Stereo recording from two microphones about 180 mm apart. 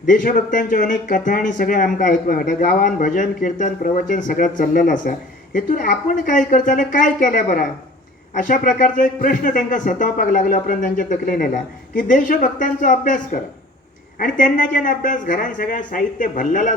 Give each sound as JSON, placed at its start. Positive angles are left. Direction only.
{"t": 0.0, "sound": "speech", "side_deg": 45}